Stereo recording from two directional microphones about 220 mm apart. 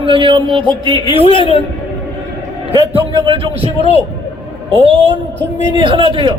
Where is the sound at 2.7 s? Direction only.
25° right (ahead or behind).